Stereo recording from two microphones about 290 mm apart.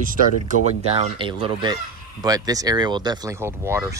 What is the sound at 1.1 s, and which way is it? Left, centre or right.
Speech, centre.